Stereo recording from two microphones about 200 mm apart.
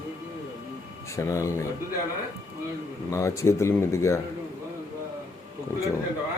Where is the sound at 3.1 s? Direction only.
15° left (ahead or behind).